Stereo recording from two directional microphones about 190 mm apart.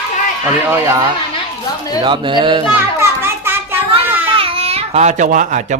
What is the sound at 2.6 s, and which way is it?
Children playing, 10° right (ahead or behind).